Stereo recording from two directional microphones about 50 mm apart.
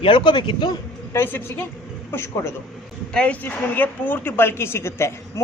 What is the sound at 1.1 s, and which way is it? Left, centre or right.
Speech, left.